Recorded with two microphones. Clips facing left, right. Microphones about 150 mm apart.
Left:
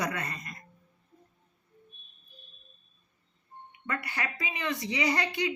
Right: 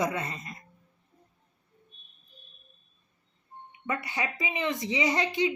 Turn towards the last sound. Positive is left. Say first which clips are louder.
# right 3 dB
turn(degrees=-20)  # may be behind; listen again after turning